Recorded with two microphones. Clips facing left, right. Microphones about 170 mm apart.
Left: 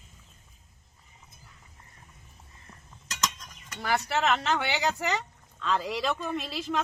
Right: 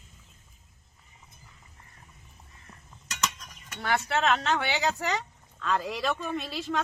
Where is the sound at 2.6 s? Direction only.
5° right (ahead or behind).